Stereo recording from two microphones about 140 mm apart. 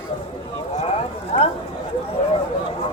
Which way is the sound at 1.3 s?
45° left (ahead or behind).